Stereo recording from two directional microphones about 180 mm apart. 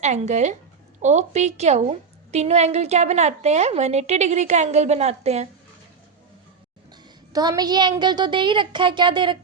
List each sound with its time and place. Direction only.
0.0 s a woman's voice: 40° right (ahead or behind)
7.3 s speech: 20° right (ahead or behind)